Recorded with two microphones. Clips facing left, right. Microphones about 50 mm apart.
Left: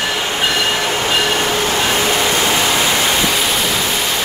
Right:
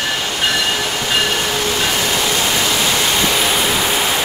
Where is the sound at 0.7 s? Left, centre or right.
Left.